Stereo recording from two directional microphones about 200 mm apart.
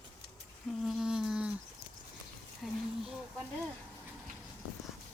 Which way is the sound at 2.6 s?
5° right (ahead or behind).